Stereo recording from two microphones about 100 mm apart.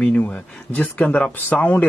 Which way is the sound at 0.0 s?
15° left (ahead or behind).